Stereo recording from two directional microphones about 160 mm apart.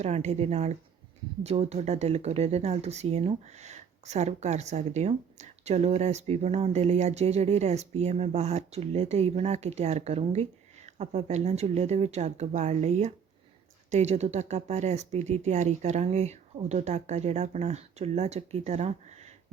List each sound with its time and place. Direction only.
0.0 s speech: 45° right (ahead or behind)